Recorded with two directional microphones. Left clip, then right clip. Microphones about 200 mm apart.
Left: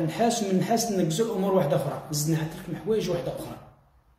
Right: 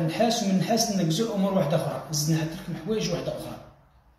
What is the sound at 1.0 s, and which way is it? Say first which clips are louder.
Speech: left 1 dB; 70° left (ahead or behind).